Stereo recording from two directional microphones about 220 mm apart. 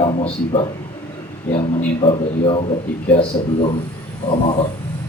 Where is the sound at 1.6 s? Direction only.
25° left (ahead or behind).